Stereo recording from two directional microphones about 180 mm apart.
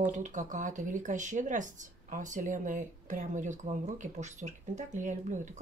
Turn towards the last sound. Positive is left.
turn(degrees=-45)  # may be behind; listen again after turning